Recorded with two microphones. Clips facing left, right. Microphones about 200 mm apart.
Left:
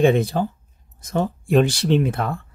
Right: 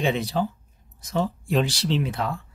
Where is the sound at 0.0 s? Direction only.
50° left (ahead or behind).